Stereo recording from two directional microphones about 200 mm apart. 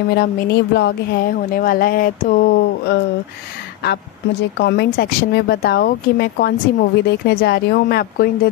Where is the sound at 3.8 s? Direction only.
60° left (ahead or behind).